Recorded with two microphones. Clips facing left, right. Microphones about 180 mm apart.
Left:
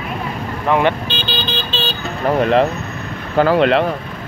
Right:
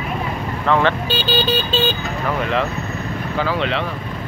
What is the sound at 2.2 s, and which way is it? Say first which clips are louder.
Speech: left 7 dB; 40° left (ahead or behind).